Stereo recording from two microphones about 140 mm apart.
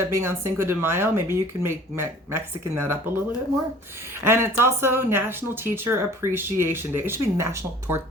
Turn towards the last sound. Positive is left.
turn(degrees=-20)  # may be behind; listen again after turning